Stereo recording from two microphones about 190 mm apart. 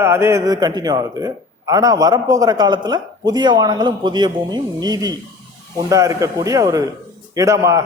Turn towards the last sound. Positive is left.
turn(degrees=-15)  # may be behind; listen again after turning